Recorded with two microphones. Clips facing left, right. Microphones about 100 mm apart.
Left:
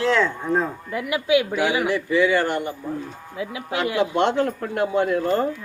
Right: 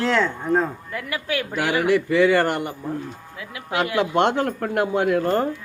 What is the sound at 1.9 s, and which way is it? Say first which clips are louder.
Speech: right 2 dB; 60° right (ahead or behind).